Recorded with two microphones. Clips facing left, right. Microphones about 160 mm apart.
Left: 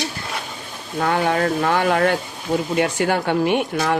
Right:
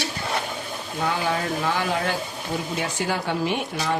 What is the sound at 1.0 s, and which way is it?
Speech, 60° left (ahead or behind).